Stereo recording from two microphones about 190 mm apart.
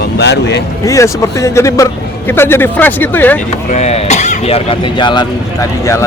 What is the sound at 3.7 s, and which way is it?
Speech, 35° left (ahead or behind).